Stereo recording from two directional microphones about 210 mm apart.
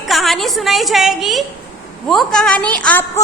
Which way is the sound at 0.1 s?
Centre (ahead or behind).